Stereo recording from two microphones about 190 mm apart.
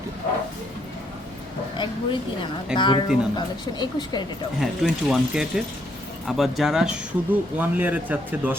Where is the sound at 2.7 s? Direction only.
25° left (ahead or behind).